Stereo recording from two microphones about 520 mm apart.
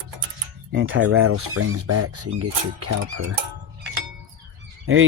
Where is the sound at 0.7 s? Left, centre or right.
Right.